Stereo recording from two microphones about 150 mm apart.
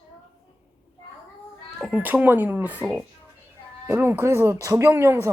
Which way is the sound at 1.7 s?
5° right (ahead or behind).